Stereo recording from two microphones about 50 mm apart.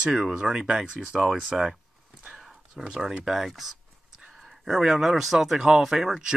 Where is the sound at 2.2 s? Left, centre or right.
Centre.